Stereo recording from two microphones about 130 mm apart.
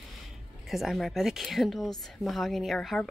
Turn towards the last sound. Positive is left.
turn(degrees=0)  # may be behind; listen again after turning